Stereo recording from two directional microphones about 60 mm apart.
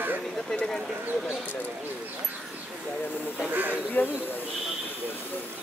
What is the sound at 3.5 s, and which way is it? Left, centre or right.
Speech, right.